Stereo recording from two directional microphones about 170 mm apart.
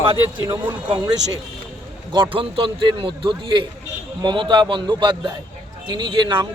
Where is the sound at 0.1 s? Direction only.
25° right (ahead or behind).